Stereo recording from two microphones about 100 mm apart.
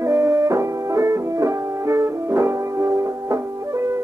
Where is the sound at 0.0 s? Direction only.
30° right (ahead or behind).